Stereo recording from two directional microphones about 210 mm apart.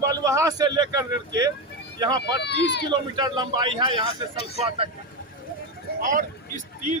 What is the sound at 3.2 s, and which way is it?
Speech, 20° right (ahead or behind).